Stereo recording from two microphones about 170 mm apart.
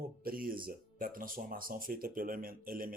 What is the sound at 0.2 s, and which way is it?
Speech, 55° right (ahead or behind).